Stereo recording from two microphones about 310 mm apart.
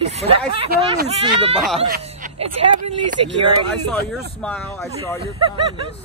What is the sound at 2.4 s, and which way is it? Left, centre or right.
Speech, right.